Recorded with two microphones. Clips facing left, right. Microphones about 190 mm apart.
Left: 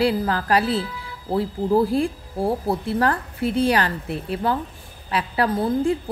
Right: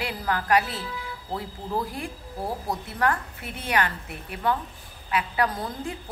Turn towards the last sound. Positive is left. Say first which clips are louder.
# left 7 dB
turn(degrees=30)  # may be behind; listen again after turning